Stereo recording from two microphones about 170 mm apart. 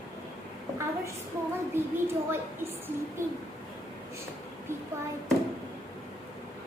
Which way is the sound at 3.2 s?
15° right (ahead or behind).